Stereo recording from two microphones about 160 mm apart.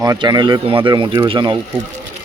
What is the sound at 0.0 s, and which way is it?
Speech, 25° right (ahead or behind).